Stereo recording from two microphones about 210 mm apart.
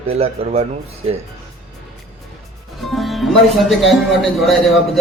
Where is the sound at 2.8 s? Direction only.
Centre (ahead or behind).